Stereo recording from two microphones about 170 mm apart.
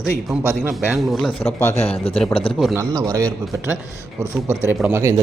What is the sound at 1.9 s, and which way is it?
Speech, 35° left (ahead or behind).